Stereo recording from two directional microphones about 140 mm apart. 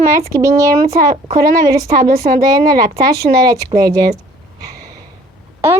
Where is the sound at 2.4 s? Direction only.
30° right (ahead or behind).